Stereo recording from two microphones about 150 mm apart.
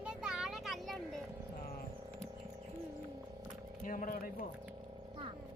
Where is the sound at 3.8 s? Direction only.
65° left (ahead or behind).